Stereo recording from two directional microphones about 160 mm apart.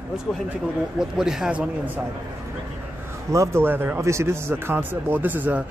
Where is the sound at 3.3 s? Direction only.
15° right (ahead or behind).